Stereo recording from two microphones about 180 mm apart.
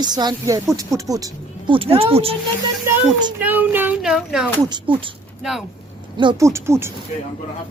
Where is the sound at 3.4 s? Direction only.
10° right (ahead or behind).